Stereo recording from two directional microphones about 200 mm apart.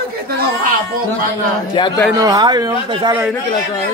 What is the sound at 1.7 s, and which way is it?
Speech, 20° left (ahead or behind).